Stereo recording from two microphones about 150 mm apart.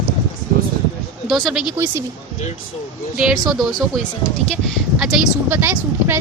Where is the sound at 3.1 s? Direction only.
5° right (ahead or behind).